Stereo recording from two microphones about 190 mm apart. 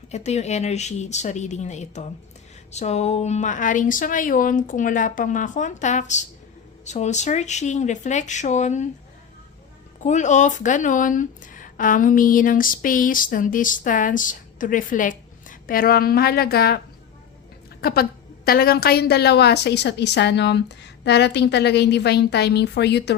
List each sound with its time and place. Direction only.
0.1 s speech: 35° left (ahead or behind)
10.0 s a woman's voice: 40° left (ahead or behind); by 23.1 s 60° left (ahead or behind)